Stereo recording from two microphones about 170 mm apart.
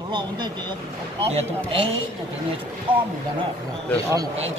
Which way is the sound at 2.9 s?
30° right (ahead or behind).